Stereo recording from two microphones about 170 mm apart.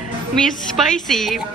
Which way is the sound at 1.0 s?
Centre (ahead or behind).